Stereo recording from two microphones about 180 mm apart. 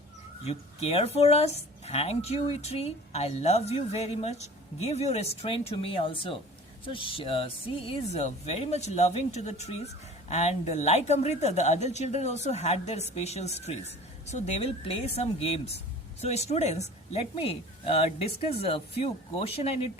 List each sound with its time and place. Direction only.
0.4 s speech: 35° left (ahead or behind)